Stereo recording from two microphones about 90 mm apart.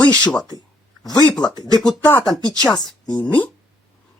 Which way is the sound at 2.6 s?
50° left (ahead or behind).